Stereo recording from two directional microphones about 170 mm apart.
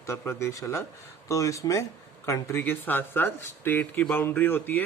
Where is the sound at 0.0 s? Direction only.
15° left (ahead or behind).